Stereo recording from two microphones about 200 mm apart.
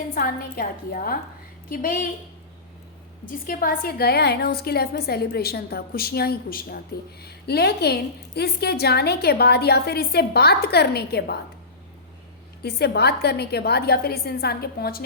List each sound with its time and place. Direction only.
0.1 s a woman's voice: 45° left (ahead or behind)
3.4 s a woman's voice: 45° left (ahead or behind)
12.6 s a woman's voice: 55° left (ahead or behind)